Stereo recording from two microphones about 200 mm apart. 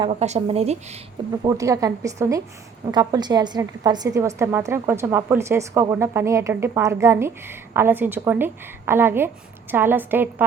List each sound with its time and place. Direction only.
0.1 s speech: 35° right (ahead or behind)
1.5 s a woman's voice: 15° right (ahead or behind)